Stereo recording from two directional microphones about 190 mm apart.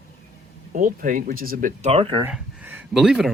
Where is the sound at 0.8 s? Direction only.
45° right (ahead or behind).